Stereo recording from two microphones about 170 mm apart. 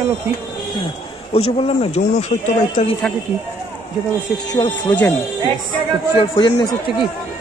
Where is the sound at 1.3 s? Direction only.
35° left (ahead or behind).